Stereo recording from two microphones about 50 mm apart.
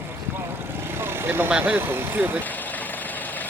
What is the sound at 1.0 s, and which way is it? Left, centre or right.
Vehicle, right.